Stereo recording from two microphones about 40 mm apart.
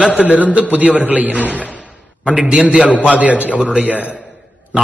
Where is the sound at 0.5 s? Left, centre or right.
Right.